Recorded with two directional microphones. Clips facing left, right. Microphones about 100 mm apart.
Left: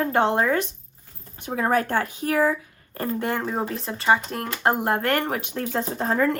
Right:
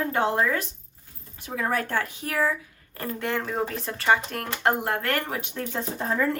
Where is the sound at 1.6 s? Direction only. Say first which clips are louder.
Left 4 dB; 40° left (ahead or behind).